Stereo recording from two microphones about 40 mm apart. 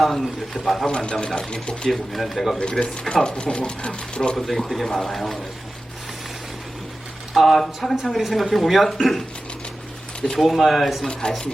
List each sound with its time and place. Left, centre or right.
0.0 s speech: centre
0.9 s speech: left
1.9 s speech: centre
2.6 s speech: left
4.4 s speech: centre
7.3 s speech: centre
10.4 s speech: centre
11.1 s speech: centre